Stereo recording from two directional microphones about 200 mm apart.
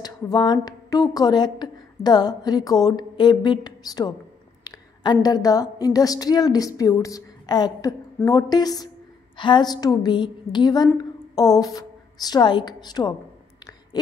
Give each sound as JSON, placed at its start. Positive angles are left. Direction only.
{"t": 0.0, "sound": "a woman's voice", "side_deg": 20}